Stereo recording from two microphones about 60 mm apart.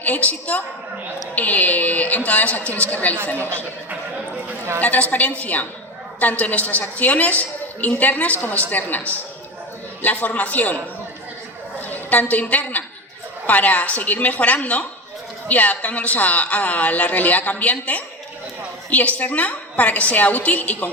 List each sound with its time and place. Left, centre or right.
0.0 s a woman's voice: left
4.8 s a woman's voice: left
11.8 s a woman's voice: left